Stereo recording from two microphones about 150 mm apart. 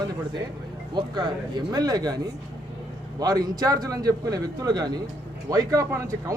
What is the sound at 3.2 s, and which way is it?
Speech, 25° right (ahead or behind).